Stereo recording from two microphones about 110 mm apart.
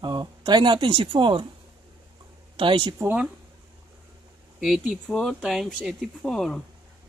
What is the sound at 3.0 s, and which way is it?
Speech, 15° right (ahead or behind).